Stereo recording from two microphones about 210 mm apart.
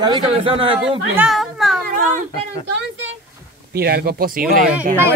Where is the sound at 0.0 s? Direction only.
25° right (ahead or behind).